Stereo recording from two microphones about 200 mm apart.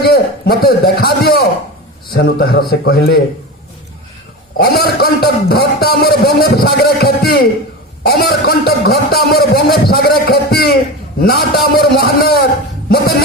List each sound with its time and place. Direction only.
0.0 s a man's voice: 50° left (ahead or behind)
4.5 s a man's voice: 50° left (ahead or behind)